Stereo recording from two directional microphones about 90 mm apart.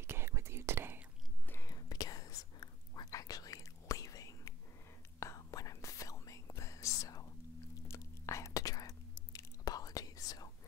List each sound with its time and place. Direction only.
0.0 s whispering: 25° right (ahead or behind)
1.6 s whispering: 45° left (ahead or behind)